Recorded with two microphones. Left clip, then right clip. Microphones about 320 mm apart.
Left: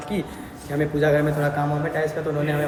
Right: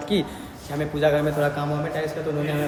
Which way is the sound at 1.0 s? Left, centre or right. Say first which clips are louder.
Right 1 dB; centre.